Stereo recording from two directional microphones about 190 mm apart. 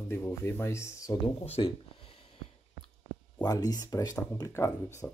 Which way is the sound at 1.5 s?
30° left (ahead or behind).